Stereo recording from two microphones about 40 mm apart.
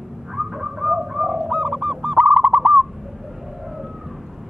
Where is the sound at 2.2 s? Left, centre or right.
Right.